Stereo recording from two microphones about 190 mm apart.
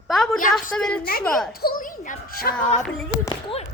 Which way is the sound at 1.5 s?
50° left (ahead or behind).